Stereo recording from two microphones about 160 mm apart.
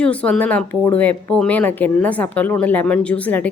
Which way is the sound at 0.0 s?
10° left (ahead or behind).